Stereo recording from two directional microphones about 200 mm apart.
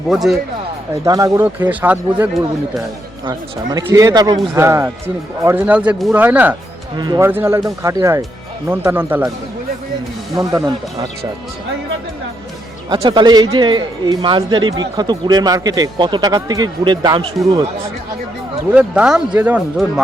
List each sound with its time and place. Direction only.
0.1 s speech: centre (ahead or behind)
1.0 s speech: 20° right (ahead or behind)
3.2 s speech: 20° right (ahead or behind)
7.0 s speech: 20° right (ahead or behind)
10.3 s speech: 20° right (ahead or behind)
12.9 s speech: 25° right (ahead or behind)
18.7 s speech: 5° right (ahead or behind)